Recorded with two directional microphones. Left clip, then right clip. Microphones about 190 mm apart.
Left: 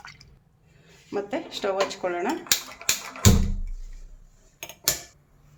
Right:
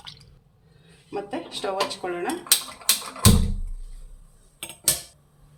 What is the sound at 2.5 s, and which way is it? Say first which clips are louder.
Cutlery: right 2 dB; 15° left (ahead or behind).